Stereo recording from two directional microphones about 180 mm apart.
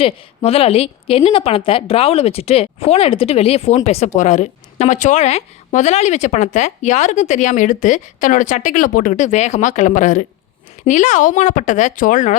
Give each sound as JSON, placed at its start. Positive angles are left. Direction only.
{"t": 0.0, "sound": "a woman's voice", "side_deg": 35}